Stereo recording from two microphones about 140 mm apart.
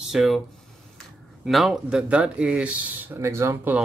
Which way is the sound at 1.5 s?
Centre (ahead or behind).